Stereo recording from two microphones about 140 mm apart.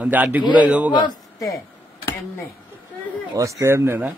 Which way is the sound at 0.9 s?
25° left (ahead or behind).